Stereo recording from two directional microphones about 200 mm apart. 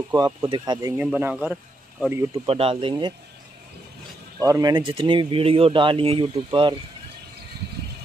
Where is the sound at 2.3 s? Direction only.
30° right (ahead or behind).